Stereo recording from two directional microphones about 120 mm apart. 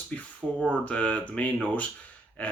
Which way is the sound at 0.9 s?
10° left (ahead or behind).